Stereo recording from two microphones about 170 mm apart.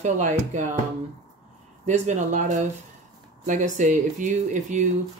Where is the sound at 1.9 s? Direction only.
45° right (ahead or behind).